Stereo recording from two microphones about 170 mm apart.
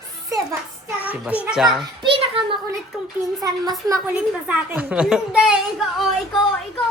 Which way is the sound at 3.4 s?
20° right (ahead or behind).